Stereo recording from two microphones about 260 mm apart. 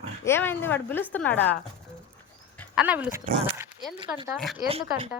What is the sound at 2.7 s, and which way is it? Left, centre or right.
Speech, centre.